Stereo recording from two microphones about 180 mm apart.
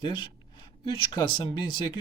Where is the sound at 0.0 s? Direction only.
25° left (ahead or behind).